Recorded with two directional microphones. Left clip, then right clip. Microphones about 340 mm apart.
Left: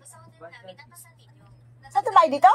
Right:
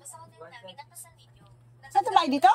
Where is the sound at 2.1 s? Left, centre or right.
Centre.